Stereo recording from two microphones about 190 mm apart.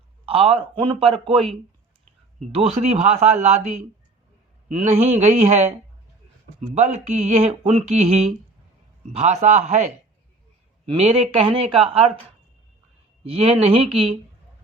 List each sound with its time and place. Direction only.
0.3 s speech: 30° right (ahead or behind)
2.6 s speech: 35° right (ahead or behind)
4.8 s speech: 35° right (ahead or behind)
13.2 s speech: 30° right (ahead or behind)